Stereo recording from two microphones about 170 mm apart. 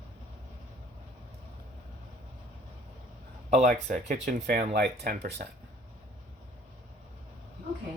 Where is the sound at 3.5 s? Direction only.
45° right (ahead or behind).